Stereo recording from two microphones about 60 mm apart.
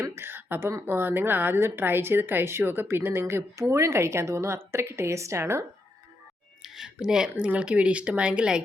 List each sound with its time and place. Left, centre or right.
0.0 s a sound: right
0.9 s a woman's voice: right
6.6 s speech: centre